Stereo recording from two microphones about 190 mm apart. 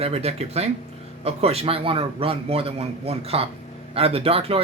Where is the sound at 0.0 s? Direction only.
35° right (ahead or behind).